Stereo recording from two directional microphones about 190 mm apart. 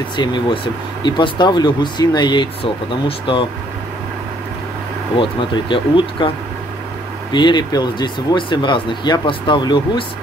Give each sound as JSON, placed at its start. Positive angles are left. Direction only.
{"t": 0.1, "sound": "speech", "side_deg": 25}
{"t": 5.2, "sound": "speech", "side_deg": 25}
{"t": 7.3, "sound": "speech", "side_deg": 25}